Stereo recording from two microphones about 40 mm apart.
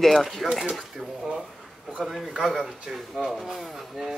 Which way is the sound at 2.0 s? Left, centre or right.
Centre.